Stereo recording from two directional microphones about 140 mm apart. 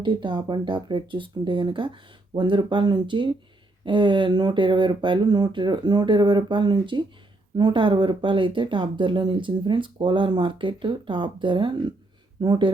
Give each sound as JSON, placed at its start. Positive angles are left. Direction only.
{"t": 0.0, "sound": "speech", "side_deg": -35}